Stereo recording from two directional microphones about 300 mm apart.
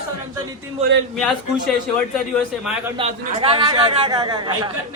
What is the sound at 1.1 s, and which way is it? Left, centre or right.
Speech, centre.